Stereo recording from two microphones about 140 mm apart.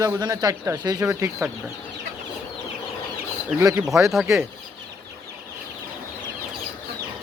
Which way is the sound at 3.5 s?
15° right (ahead or behind).